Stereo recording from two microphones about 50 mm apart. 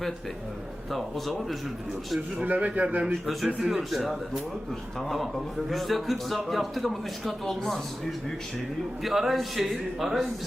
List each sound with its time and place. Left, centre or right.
0.9 s a man's voice: centre
2.4 s a man's voice: right
3.2 s a man's voice: centre